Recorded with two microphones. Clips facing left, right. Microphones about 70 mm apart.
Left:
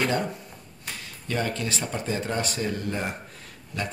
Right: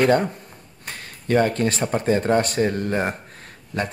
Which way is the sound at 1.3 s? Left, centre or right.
Right.